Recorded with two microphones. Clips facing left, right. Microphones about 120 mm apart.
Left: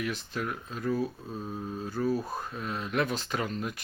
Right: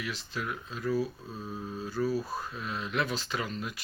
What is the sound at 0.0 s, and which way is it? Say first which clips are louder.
Speech: left 3 dB; 50° left (ahead or behind).